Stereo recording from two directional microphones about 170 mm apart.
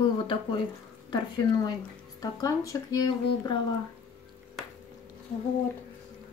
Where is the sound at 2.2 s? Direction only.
20° left (ahead or behind).